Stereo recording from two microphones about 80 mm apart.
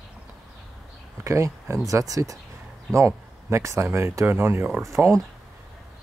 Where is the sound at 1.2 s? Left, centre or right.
Right.